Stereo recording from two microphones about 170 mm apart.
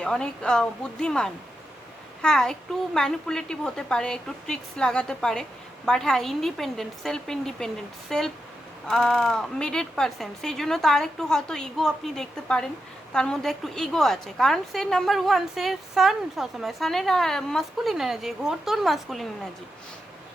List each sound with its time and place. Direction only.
0.0 s a woman's voice: 5° left (ahead or behind)